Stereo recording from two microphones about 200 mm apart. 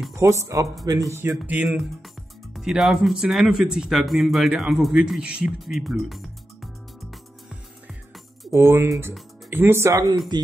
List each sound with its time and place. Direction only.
0.1 s music: 15° right (ahead or behind)
2.5 s speech: centre (ahead or behind)
8.5 s music: 15° right (ahead or behind)